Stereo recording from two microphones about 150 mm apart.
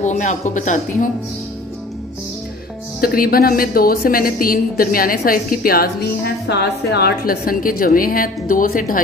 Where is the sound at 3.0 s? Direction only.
75° left (ahead or behind).